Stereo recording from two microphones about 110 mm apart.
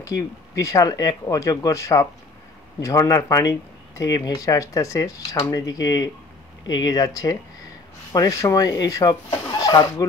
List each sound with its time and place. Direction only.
0.6 s speech: 30° left (ahead or behind)